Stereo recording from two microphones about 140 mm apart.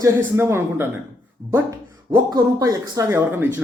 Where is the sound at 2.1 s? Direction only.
25° right (ahead or behind).